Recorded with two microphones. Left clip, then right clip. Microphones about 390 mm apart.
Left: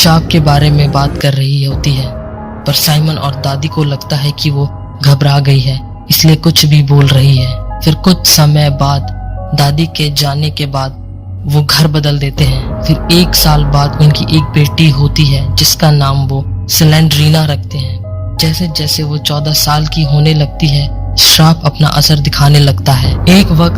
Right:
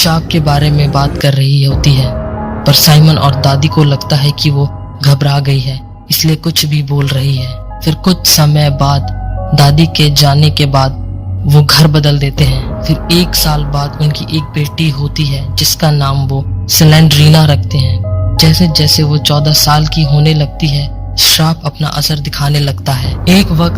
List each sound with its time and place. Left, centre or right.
0.0 s speech: left; by 2.1 s right
2.4 s speech: right; by 4.7 s centre
4.9 s speech: centre; by 5.7 s left
6.1 s speech: left
7.9 s speech: left; by 9.0 s centre
9.5 s speech: right
11.4 s a man's voice: right; by 12.3 s centre
12.7 s speech: centre
13.1 s speech: left
15.5 s speech: left
16.6 s speech: centre; by 17.8 s right
18.3 s speech: right; by 20.5 s centre
20.6 s speech: centre
21.2 s speech: left